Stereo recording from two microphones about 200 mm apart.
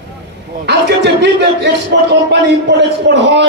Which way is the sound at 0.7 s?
60° right (ahead or behind).